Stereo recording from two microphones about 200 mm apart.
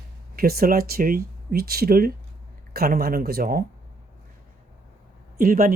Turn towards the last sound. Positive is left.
turn(degrees=-45)  # may be behind; listen again after turning